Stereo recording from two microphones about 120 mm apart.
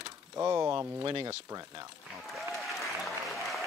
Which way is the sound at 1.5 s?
30° right (ahead or behind).